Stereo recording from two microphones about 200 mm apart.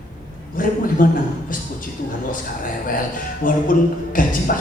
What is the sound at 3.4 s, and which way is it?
Speech, 40° left (ahead or behind).